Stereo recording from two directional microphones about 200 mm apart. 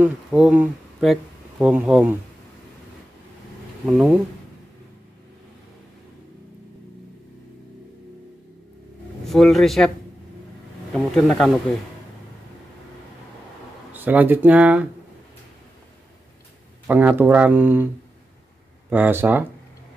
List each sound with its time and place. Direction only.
0.0 s speech: 5° right (ahead or behind)
3.8 s speech: 5° right (ahead or behind)
9.2 s speech: centre (ahead or behind)
10.9 s speech: 5° left (ahead or behind)
13.9 s speech: 10° right (ahead or behind)
16.8 s speech: 10° right (ahead or behind)
18.9 s speech: 10° right (ahead or behind)